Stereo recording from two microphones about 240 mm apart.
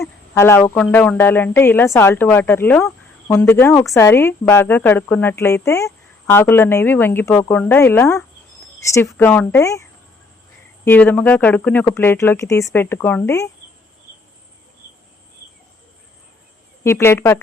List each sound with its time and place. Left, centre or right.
0.3 s speech: centre
10.8 s speech: centre
16.8 s speech: centre